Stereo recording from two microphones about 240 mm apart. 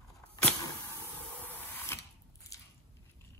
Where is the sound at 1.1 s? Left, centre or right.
Centre.